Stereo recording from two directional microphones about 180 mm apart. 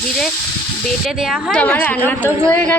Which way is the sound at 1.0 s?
5° right (ahead or behind).